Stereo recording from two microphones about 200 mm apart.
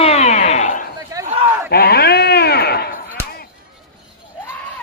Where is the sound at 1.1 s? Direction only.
15° right (ahead or behind).